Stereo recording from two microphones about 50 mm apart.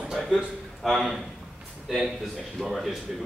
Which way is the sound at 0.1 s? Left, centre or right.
Centre.